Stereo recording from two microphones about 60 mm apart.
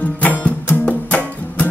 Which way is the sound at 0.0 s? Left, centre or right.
Left.